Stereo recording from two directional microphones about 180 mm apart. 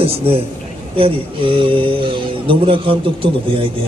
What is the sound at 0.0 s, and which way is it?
A woman's voice, 30° right (ahead or behind).